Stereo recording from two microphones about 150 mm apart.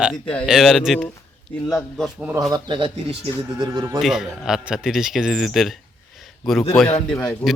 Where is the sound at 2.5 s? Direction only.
35° right (ahead or behind).